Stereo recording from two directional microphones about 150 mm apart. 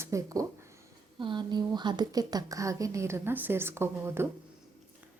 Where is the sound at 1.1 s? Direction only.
30° right (ahead or behind); by 4.3 s 15° right (ahead or behind).